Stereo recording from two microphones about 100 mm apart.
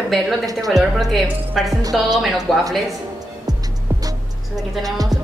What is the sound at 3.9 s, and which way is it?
Music, 40° right (ahead or behind).